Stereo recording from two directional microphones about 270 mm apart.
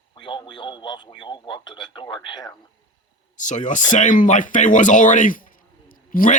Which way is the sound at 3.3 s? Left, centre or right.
Left.